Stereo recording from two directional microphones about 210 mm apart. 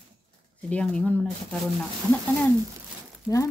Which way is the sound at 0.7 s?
5° left (ahead or behind).